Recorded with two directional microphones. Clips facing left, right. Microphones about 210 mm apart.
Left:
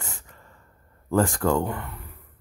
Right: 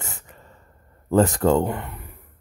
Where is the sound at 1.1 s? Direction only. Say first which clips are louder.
Right 4 dB; 20° right (ahead or behind).